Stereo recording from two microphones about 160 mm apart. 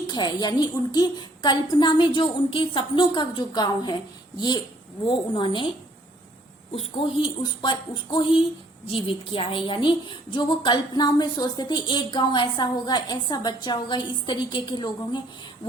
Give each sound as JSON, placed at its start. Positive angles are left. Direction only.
{"t": 0.1, "sound": "a woman's voice", "side_deg": 25}